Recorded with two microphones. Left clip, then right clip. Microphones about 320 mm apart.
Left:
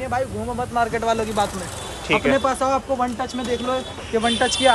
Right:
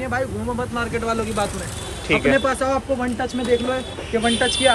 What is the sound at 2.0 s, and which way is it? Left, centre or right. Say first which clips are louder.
Speech: right 1 dB; centre.